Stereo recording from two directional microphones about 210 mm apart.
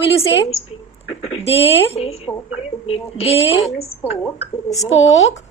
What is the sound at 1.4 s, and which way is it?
A woman's voice, 30° left (ahead or behind).